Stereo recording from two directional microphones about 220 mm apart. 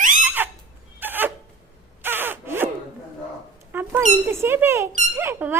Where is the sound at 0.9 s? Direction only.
10° right (ahead or behind).